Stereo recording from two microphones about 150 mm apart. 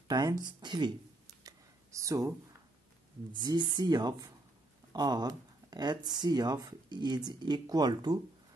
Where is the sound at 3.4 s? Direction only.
30° right (ahead or behind).